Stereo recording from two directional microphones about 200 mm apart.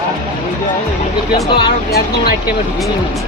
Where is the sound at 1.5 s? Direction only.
25° left (ahead or behind).